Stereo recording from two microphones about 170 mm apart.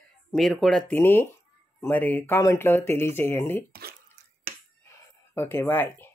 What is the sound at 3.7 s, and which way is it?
Speech, 65° right (ahead or behind).